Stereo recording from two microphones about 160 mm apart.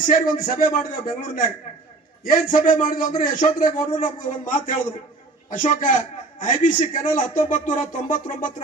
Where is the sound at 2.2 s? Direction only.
60° left (ahead or behind).